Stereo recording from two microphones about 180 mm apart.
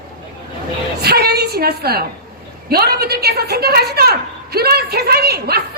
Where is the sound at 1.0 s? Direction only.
60° right (ahead or behind).